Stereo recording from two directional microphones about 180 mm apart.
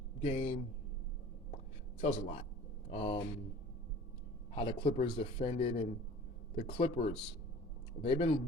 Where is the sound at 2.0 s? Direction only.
45° left (ahead or behind).